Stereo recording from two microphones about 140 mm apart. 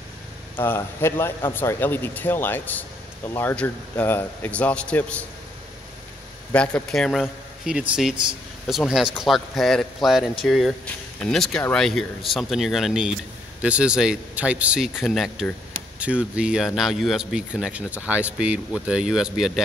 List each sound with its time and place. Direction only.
0.6 s a man's voice: 15° left (ahead or behind)
6.5 s a man's voice: 10° left (ahead or behind)